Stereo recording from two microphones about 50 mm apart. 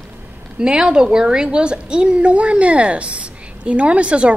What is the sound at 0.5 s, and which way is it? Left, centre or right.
A woman's voice, centre.